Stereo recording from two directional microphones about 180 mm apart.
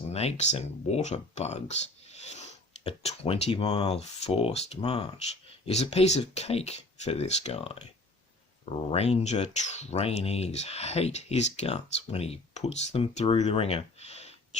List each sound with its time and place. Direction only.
0.1 s speech: 35° left (ahead or behind)